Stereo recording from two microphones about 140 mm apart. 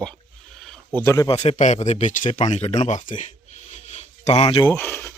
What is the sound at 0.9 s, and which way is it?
Speech, 20° left (ahead or behind).